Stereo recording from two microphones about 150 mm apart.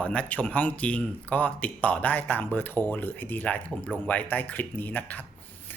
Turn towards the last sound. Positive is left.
turn(degrees=10)  # may be behind; listen again after turning